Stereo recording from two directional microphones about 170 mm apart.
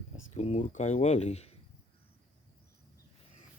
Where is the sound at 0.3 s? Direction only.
40° left (ahead or behind).